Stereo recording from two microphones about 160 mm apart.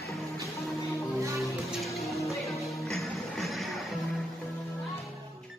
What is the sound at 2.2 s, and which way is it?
Music, 20° left (ahead or behind).